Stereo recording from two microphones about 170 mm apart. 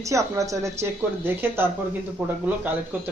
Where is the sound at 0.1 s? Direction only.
20° right (ahead or behind).